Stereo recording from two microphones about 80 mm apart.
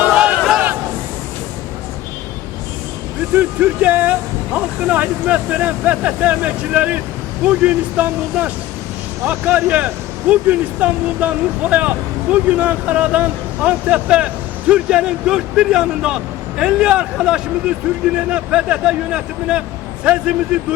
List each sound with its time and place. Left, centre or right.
0.0 s crowd: centre
3.3 s speech: centre